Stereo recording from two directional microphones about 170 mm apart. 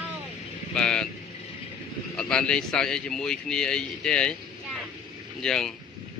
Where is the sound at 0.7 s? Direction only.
5° left (ahead or behind).